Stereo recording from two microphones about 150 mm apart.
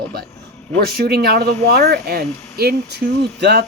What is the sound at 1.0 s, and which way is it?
Speech, 90° right.